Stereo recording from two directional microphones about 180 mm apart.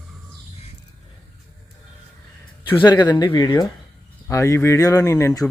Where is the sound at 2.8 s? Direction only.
25° left (ahead or behind).